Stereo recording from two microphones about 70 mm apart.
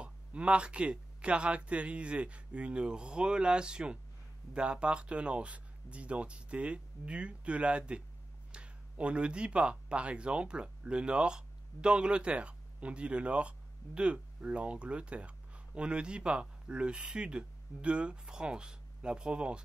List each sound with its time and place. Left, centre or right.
0.0 s speech: centre